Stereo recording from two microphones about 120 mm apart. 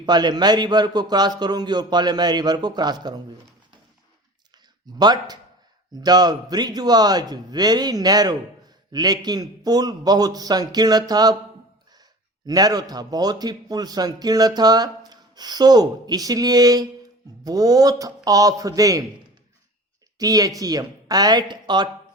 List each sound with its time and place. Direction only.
0.0 s a man's voice: 35° right (ahead or behind)
4.9 s a man's voice: 35° right (ahead or behind)
12.5 s a man's voice: 35° right (ahead or behind)
20.1 s a woman's voice: 30° right (ahead or behind)